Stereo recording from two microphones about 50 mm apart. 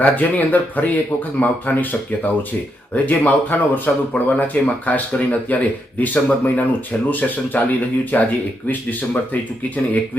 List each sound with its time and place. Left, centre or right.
0.0 s speech: left